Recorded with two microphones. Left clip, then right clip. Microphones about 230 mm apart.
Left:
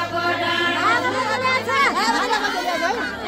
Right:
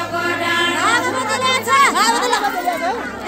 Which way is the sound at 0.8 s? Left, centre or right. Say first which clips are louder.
Right 2 dB; right.